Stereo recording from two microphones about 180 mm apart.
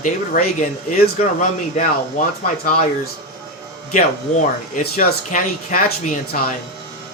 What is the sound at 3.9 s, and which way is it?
Speech, 45° left (ahead or behind).